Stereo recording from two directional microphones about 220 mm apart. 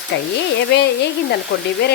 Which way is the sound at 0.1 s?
50° left (ahead or behind).